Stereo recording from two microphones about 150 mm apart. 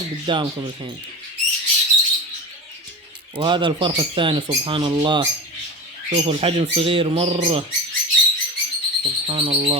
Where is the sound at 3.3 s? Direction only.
30° right (ahead or behind).